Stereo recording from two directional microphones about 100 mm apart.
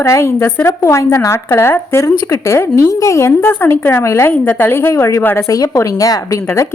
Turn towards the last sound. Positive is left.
turn(degrees=35)  # may be behind; listen again after turning